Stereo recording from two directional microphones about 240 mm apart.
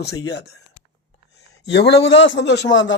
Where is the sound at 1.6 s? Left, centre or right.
Left.